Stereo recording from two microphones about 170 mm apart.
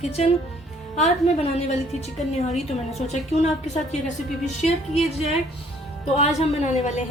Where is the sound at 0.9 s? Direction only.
40° left (ahead or behind).